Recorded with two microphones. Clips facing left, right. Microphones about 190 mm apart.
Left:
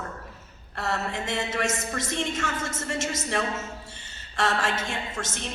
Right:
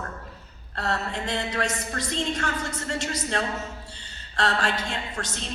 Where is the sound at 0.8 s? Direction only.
25° left (ahead or behind).